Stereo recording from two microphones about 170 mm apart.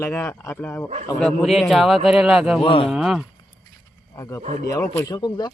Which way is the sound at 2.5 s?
30° left (ahead or behind).